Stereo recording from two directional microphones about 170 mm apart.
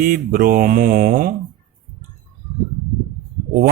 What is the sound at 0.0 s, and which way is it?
Speech, 55° right (ahead or behind).